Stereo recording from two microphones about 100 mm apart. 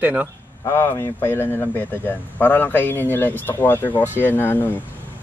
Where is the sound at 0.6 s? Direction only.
30° left (ahead or behind).